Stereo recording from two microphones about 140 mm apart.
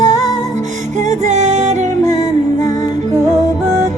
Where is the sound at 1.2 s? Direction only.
55° right (ahead or behind).